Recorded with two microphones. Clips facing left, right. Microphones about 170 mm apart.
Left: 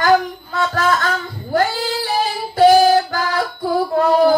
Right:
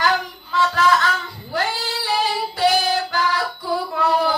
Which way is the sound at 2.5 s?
50° left (ahead or behind).